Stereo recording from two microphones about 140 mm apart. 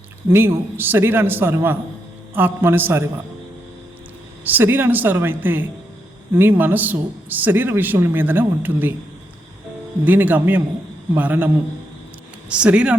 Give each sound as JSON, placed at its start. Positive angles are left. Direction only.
{"t": 0.3, "sound": "speech", "side_deg": -15}
{"t": 4.4, "sound": "speech", "side_deg": -15}
{"t": 10.0, "sound": "speech", "side_deg": -10}